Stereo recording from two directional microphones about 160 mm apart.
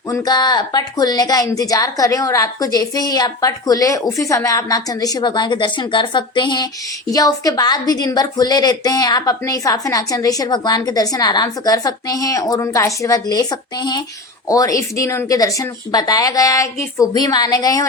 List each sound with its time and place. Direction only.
0.1 s a woman's voice: 25° left (ahead or behind)